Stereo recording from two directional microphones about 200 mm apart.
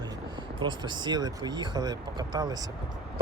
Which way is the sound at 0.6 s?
20° right (ahead or behind).